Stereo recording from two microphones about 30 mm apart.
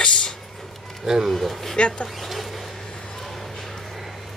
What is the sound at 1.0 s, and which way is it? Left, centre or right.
Speech, centre.